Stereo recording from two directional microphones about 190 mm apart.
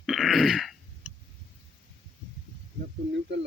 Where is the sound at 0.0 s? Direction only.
Centre (ahead or behind).